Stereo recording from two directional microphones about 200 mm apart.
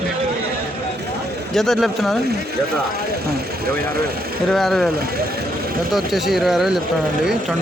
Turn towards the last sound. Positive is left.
turn(degrees=0)  # may be behind; listen again after turning